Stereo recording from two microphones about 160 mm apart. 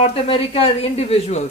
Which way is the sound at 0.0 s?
35° left (ahead or behind).